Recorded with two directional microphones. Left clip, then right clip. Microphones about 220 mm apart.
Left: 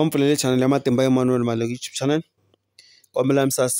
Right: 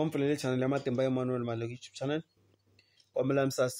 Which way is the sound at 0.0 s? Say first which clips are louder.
Left 11 dB; 55° left (ahead or behind).